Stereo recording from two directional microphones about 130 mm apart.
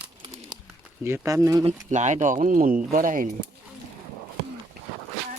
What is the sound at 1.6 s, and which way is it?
Speech, 65° right (ahead or behind).